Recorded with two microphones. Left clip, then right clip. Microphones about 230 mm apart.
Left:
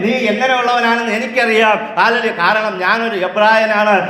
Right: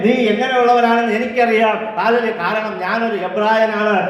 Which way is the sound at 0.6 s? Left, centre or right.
Left.